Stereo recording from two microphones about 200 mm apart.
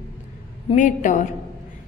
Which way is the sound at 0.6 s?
40° left (ahead or behind).